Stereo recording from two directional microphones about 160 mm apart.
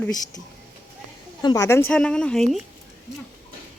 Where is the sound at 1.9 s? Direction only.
5° left (ahead or behind).